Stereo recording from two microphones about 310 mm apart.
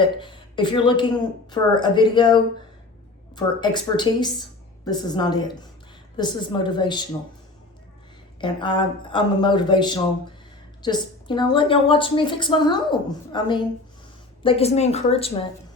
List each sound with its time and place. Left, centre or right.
0.0 s a woman's voice: centre
8.4 s a woman's voice: centre